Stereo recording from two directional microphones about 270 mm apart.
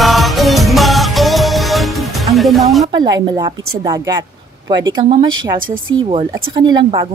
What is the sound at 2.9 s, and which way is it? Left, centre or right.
A woman's voice, centre.